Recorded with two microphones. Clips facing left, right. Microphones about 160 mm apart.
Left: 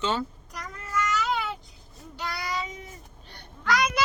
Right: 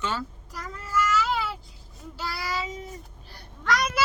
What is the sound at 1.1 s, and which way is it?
Babbling, 5° right (ahead or behind).